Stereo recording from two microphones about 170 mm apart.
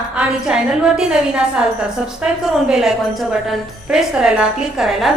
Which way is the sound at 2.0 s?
5° right (ahead or behind).